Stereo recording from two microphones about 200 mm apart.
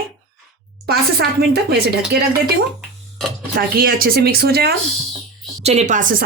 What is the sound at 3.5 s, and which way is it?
Speech, 45° right (ahead or behind).